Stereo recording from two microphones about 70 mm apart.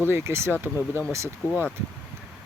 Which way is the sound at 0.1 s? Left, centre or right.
Right.